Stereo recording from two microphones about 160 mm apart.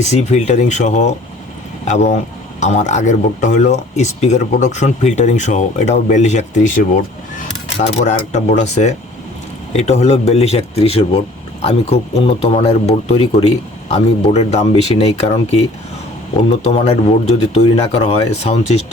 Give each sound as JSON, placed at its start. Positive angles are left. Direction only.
{"t": 0.0, "sound": "speech", "side_deg": 45}